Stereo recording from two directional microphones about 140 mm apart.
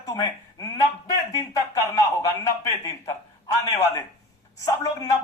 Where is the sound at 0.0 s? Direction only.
25° left (ahead or behind).